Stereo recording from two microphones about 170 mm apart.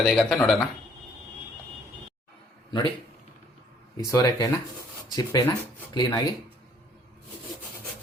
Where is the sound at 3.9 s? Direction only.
20° left (ahead or behind).